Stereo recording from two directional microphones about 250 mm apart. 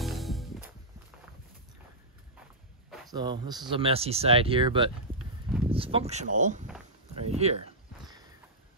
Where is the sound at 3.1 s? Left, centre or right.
Centre.